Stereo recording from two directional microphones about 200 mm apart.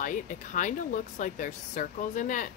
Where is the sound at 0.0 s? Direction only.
40° left (ahead or behind).